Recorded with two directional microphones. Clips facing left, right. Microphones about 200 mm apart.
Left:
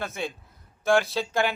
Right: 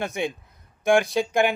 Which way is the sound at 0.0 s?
15° right (ahead or behind).